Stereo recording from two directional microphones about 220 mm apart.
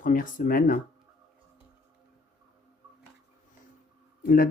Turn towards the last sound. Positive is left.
turn(degrees=40)  # may be behind; listen again after turning